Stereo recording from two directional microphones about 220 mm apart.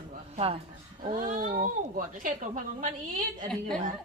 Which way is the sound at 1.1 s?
40° right (ahead or behind).